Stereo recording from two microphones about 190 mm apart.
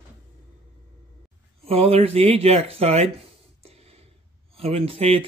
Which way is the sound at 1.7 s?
30° right (ahead or behind).